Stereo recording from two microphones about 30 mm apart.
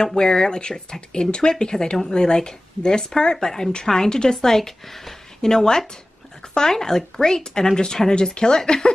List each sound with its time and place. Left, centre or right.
0.0 s speech: left